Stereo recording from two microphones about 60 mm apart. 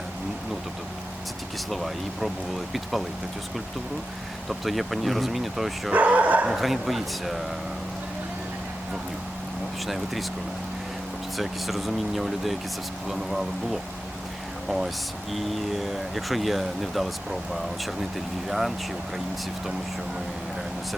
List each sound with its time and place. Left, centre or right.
1.7 s speech: centre
4.4 s speech: centre
5.9 s speech: right
6.5 s speech: centre
9.8 s speech: centre
11.3 s speech: centre
14.7 s speech: centre
18.4 s speech: centre